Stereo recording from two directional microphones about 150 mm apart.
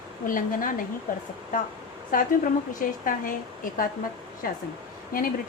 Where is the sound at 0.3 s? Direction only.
65° left (ahead or behind).